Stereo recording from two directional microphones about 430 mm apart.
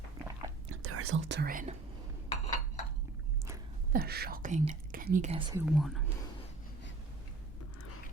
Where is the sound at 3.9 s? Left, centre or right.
Right; by 6.0 s centre.